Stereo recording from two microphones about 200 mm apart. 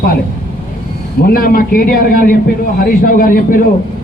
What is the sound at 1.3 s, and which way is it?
A man's voice, 45° left (ahead or behind).